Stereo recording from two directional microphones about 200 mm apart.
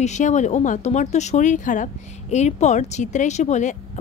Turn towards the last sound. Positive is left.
turn(degrees=35)  # may be behind; listen again after turning